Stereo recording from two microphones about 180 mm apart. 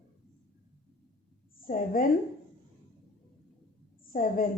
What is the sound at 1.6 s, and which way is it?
Speech, 50° left (ahead or behind).